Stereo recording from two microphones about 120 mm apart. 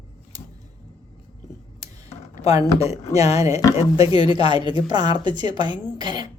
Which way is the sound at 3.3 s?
25° right (ahead or behind).